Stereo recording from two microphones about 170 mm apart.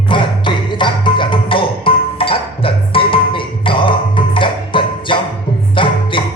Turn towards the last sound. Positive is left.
turn(degrees=30)  # may be behind; listen again after turning